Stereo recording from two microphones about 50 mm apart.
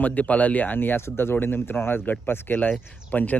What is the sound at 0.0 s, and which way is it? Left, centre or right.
Speech, left.